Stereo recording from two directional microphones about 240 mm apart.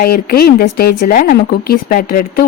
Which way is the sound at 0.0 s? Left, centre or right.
Left.